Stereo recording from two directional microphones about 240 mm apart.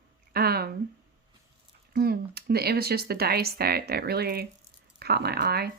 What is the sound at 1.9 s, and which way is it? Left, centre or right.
Speech, right.